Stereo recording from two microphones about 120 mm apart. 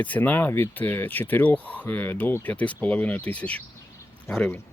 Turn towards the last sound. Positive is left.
turn(degrees=10)  # may be behind; listen again after turning